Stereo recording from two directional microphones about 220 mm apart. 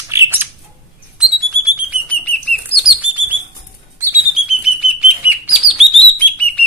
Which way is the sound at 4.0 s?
5° right (ahead or behind).